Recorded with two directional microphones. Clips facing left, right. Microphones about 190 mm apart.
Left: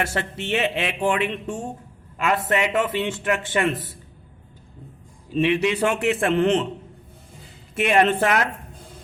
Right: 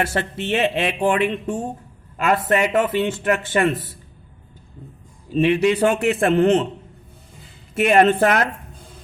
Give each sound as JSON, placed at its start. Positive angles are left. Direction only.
{"t": 0.0, "sound": "speech", "side_deg": -35}
{"t": 5.3, "sound": "speech", "side_deg": -40}
{"t": 7.8, "sound": "speech", "side_deg": -40}